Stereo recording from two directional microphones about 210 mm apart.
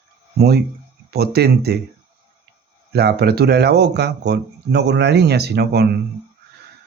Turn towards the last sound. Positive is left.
turn(degrees=-50)  # may be behind; listen again after turning